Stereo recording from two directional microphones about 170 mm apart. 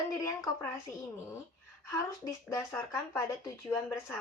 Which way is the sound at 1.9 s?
15° left (ahead or behind).